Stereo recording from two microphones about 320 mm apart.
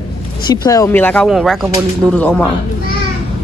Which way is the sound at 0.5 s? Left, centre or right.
Centre.